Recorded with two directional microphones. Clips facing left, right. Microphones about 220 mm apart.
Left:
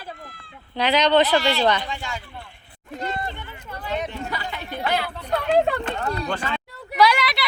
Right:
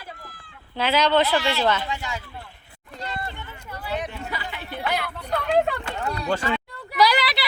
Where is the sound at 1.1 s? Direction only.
20° left (ahead or behind).